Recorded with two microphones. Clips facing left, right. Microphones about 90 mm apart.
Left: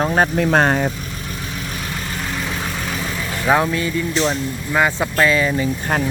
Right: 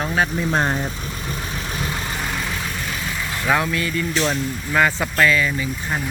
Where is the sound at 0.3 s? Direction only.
75° left (ahead or behind).